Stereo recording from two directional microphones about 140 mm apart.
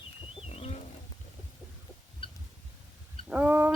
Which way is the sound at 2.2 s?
40° left (ahead or behind).